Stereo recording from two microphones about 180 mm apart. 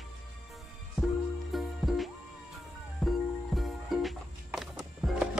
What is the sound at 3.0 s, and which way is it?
Music, centre (ahead or behind).